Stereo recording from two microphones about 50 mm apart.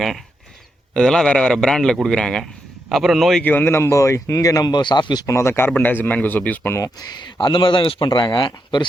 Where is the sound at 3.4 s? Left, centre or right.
Left.